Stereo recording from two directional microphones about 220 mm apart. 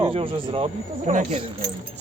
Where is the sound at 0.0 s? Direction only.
25° right (ahead or behind).